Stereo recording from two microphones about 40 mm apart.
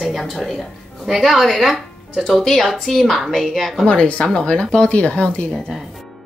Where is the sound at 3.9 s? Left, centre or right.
Left.